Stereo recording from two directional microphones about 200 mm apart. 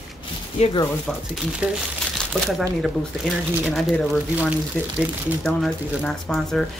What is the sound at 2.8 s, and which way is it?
Speech, centre (ahead or behind).